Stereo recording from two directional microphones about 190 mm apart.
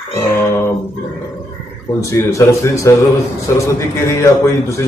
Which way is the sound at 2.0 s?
15° left (ahead or behind).